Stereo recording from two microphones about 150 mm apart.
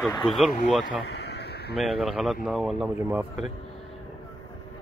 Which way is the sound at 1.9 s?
Centre (ahead or behind).